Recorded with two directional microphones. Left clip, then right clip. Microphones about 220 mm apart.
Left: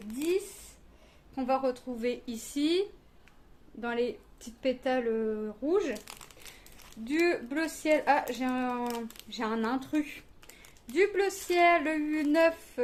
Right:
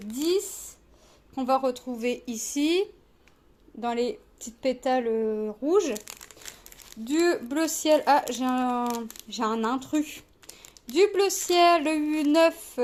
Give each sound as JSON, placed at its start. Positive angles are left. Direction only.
{"t": 1.4, "sound": "speech", "side_deg": -25}
{"t": 10.9, "sound": "speech", "side_deg": -25}